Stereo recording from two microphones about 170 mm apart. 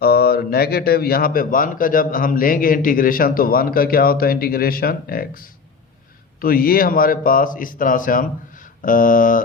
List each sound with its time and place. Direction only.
0.0 s a man's voice: 65° left (ahead or behind)